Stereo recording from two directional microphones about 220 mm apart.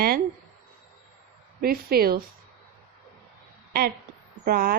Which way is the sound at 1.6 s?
45° right (ahead or behind).